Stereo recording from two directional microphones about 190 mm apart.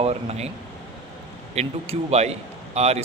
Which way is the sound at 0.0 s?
35° right (ahead or behind).